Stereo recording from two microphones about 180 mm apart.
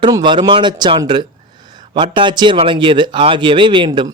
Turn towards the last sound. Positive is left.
turn(degrees=-25)  # may be behind; listen again after turning